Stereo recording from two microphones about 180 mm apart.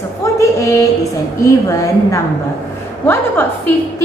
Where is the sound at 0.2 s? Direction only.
15° left (ahead or behind).